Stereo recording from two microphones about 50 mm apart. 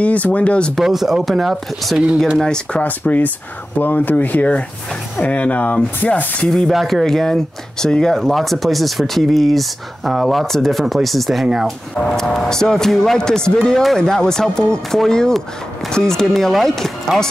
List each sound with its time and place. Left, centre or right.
0.0 s speech: left
0.7 s speech: centre
2.3 s speech: centre
2.8 s speech: left
6.7 s speech: centre
11.9 s speech: centre